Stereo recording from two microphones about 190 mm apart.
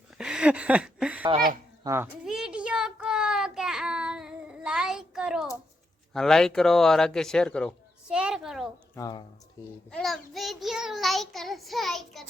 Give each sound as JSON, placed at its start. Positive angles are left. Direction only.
{"t": 0.2, "sound": "a child's voice", "side_deg": -5}
{"t": 2.2, "sound": "child singing", "side_deg": -5}
{"t": 8.0, "sound": "a sound", "side_deg": -5}
{"t": 9.0, "sound": "a child's voice", "side_deg": 20}
{"t": 9.9, "sound": "child singing", "side_deg": 0}